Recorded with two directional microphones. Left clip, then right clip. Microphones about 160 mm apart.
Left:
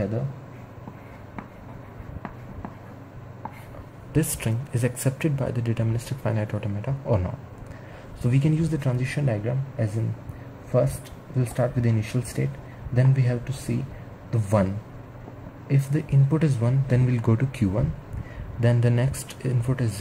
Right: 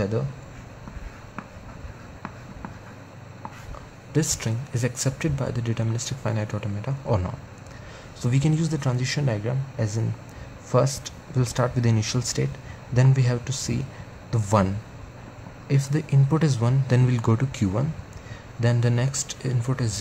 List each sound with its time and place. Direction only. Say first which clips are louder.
4.1 s speech: right 1 dB; 10° right (ahead or behind)
11.3 s speech: right 1 dB; 25° right (ahead or behind)
15.7 s speech: right 1 dB; 15° right (ahead or behind)